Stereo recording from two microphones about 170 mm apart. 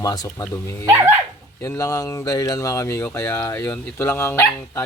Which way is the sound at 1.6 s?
20° left (ahead or behind).